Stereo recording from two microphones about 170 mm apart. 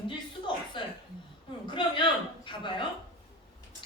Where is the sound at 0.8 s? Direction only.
30° left (ahead or behind).